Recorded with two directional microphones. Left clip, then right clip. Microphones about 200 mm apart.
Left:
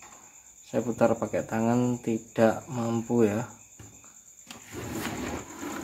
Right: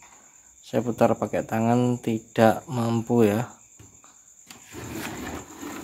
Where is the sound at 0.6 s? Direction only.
45° right (ahead or behind).